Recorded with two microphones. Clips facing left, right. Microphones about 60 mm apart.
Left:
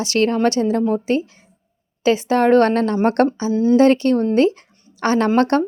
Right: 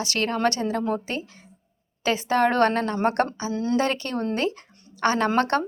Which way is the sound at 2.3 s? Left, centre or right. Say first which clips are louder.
Left 5 dB; left.